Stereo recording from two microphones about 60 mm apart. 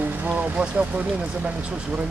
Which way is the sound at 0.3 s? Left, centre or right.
Centre.